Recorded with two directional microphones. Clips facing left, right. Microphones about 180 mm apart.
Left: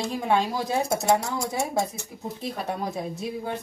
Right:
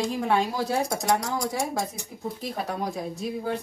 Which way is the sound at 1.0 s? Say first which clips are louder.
Left 2 dB; 25° left (ahead or behind).